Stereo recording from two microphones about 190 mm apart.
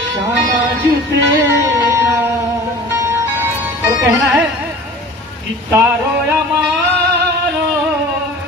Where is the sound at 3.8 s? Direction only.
10° right (ahead or behind).